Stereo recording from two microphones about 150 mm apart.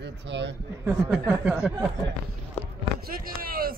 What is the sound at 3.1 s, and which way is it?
Speech, 75° right (ahead or behind).